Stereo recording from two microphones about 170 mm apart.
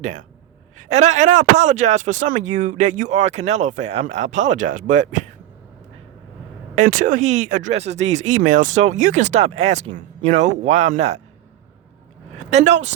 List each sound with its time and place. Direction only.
0.8 s speech: 40° right (ahead or behind)
6.7 s speech: 50° right (ahead or behind)
12.5 s speech: 40° right (ahead or behind)